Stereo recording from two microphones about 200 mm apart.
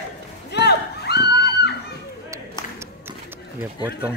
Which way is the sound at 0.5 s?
55° left (ahead or behind).